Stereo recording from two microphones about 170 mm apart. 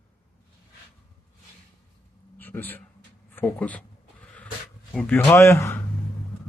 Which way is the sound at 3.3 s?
10° left (ahead or behind).